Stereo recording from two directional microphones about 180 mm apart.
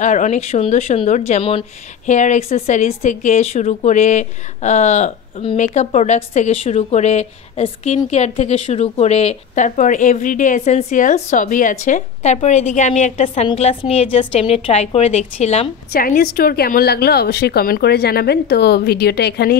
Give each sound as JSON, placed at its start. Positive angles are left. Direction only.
{"t": 0.0, "sound": "a woman's voice", "side_deg": 45}
{"t": 15.9, "sound": "a woman's voice", "side_deg": 55}